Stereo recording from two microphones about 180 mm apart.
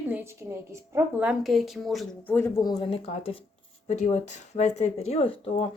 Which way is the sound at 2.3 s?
20° left (ahead or behind).